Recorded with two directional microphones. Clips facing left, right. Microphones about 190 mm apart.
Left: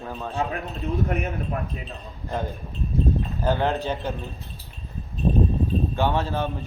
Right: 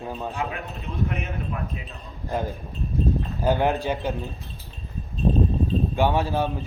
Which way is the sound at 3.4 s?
15° right (ahead or behind).